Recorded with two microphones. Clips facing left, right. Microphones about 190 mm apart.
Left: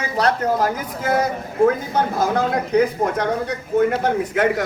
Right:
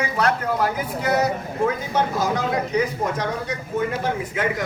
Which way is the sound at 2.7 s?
55° left (ahead or behind).